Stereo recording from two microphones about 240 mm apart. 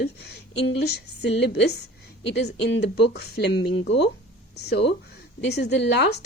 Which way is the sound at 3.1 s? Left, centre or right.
Left.